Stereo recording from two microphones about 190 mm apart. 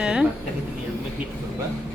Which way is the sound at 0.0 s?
5° right (ahead or behind).